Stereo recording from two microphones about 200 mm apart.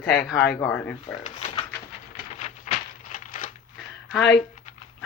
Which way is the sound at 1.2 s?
30° left (ahead or behind).